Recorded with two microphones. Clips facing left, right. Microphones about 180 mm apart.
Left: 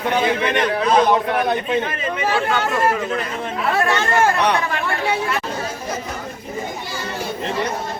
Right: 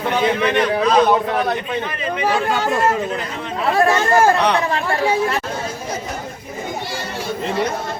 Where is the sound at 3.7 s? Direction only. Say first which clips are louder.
Right 4 dB; 35° right (ahead or behind).